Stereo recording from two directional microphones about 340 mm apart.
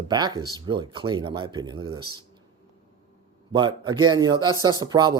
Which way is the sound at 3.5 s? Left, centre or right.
Centre.